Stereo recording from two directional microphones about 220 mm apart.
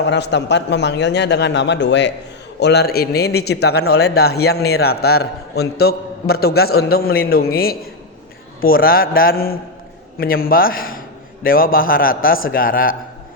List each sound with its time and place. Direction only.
0.0 s a man's voice: 50° left (ahead or behind)